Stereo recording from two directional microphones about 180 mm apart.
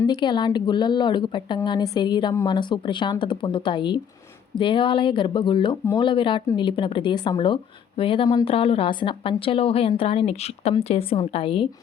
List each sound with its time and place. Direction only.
0.0 s speech: 25° left (ahead or behind)